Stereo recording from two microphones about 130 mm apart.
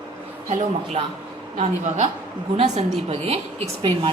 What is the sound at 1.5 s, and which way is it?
A woman's voice, 55° right (ahead or behind).